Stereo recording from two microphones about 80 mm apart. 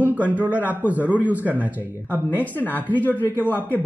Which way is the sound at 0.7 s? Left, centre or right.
Right.